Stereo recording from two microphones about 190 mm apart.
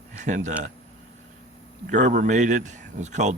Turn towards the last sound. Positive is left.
turn(degrees=-40)  # may be behind; listen again after turning